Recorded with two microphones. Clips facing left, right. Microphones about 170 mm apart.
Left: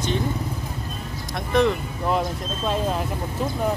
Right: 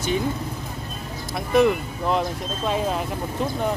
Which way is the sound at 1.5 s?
5° right (ahead or behind).